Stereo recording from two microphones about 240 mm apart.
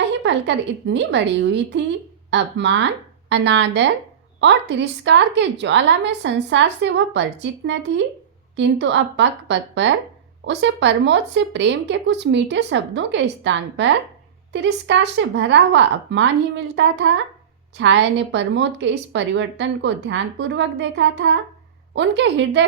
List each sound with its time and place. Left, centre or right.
0.2 s a woman's voice: right